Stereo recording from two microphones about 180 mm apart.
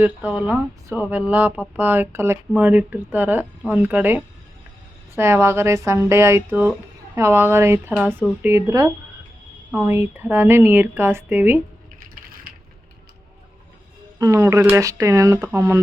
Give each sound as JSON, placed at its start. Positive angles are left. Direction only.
{"t": 0.0, "sound": "a woman's voice", "side_deg": -10}
{"t": 12.5, "sound": "a sound", "side_deg": -50}
{"t": 14.2, "sound": "a woman's voice", "side_deg": -15}